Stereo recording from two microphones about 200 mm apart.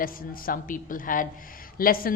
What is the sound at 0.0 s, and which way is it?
A woman's voice, 45° left (ahead or behind).